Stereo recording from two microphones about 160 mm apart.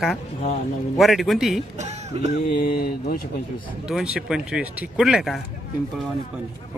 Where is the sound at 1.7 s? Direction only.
45° right (ahead or behind).